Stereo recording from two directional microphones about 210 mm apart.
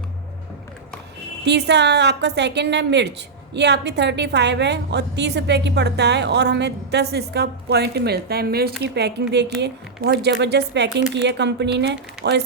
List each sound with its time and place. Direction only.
1.5 s a woman's voice: 55° right (ahead or behind)